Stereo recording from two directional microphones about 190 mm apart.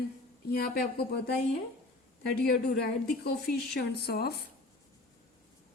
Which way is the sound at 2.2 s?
55° left (ahead or behind).